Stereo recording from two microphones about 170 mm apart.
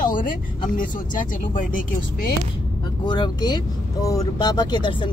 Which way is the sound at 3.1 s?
25° left (ahead or behind).